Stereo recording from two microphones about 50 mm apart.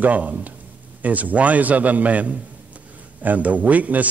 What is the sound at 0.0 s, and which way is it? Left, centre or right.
A man's voice, right.